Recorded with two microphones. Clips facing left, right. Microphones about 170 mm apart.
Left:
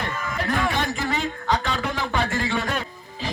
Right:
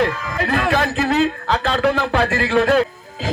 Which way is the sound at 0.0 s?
90° right.